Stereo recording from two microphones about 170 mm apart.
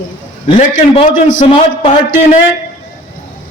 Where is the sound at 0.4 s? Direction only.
30° left (ahead or behind).